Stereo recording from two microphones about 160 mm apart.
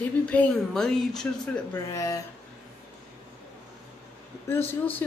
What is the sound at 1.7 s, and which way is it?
Speech, 20° left (ahead or behind).